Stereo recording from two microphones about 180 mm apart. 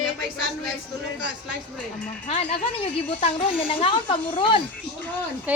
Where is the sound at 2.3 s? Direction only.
35° left (ahead or behind).